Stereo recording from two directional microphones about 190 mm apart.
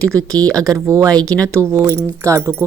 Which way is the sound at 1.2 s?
5° left (ahead or behind).